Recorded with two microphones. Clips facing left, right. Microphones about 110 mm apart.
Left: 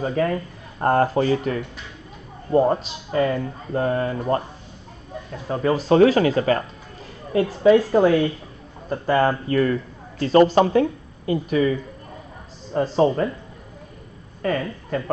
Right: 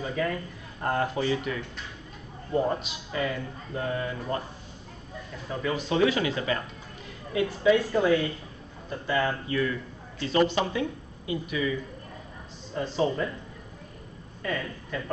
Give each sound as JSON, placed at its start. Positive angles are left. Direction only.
{"t": 0.0, "sound": "speech", "side_deg": 45}
{"t": 5.3, "sound": "a man's voice", "side_deg": 40}
{"t": 12.7, "sound": "speech", "side_deg": 40}
{"t": 14.4, "sound": "a woman's voice", "side_deg": 50}